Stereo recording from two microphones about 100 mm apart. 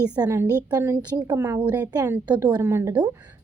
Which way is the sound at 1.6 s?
45° right (ahead or behind).